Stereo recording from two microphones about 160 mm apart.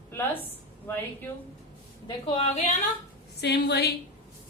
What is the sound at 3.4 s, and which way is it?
Speech, 90° left.